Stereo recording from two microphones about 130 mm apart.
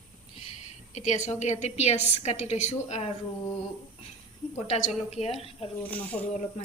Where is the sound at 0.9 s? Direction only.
65° left (ahead or behind).